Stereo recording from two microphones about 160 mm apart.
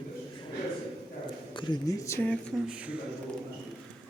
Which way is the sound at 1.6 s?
25° left (ahead or behind).